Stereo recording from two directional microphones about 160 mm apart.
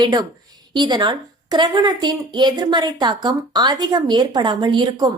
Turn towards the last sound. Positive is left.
turn(degrees=-25)  # may be behind; listen again after turning